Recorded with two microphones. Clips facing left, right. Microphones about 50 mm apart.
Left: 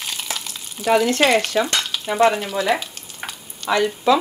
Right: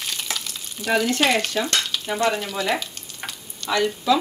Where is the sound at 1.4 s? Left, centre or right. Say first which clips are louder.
Left 3 dB; centre.